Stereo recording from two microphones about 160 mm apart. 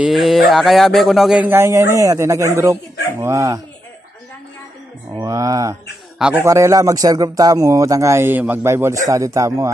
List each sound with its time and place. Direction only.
0.0 s a sound: centre (ahead or behind)
0.5 s a man's voice: centre (ahead or behind); by 3.6 s 20° right (ahead or behind)
5.1 s mantra: 20° right (ahead or behind)
6.3 s speech: 20° right (ahead or behind)